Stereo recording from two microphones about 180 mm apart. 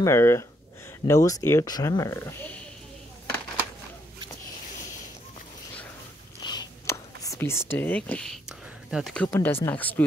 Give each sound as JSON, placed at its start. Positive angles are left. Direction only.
{"t": 0.0, "sound": "speech", "side_deg": 15}
{"t": 6.4, "sound": "whispering", "side_deg": 20}
{"t": 9.3, "sound": "speech", "side_deg": 15}